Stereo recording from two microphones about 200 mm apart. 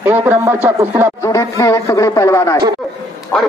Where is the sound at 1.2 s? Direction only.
15° left (ahead or behind).